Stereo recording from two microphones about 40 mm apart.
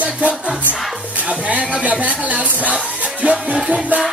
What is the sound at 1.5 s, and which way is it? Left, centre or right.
Speech, right.